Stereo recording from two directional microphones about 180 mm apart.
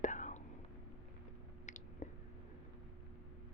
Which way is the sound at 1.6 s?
45° left (ahead or behind).